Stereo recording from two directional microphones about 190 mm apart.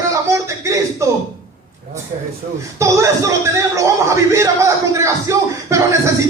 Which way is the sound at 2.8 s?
15° right (ahead or behind).